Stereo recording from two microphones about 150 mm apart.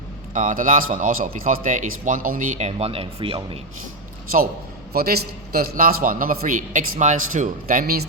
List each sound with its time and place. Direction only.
0.3 s a man's voice: 60° right (ahead or behind)
2.6 s speech: 40° right (ahead or behind)
4.9 s a man's voice: 90° right